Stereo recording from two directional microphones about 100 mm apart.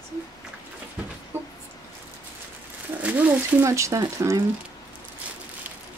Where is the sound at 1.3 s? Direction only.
25° right (ahead or behind).